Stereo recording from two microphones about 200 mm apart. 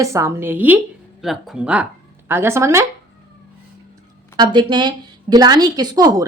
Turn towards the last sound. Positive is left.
turn(degrees=-20)  # may be behind; listen again after turning